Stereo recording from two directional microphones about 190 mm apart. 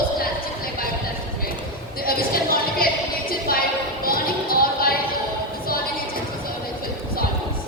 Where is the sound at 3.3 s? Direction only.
50° left (ahead or behind).